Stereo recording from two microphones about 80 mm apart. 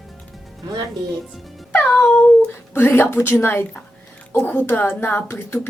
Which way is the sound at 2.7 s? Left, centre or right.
Left.